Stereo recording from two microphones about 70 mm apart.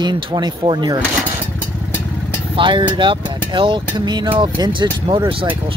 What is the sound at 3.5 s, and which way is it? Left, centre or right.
Speech, right.